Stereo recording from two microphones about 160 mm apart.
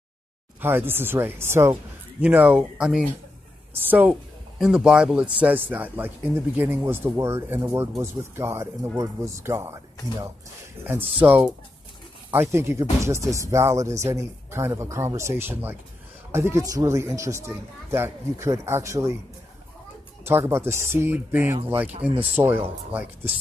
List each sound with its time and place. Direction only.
0.6 s speech: 15° right (ahead or behind)
10.9 s speech: 10° right (ahead or behind)
20.2 s speech: 15° right (ahead or behind)